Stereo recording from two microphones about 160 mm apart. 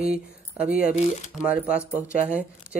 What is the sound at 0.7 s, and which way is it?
Speech, 60° left (ahead or behind).